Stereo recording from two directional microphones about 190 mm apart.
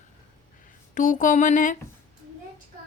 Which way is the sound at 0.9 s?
45° left (ahead or behind).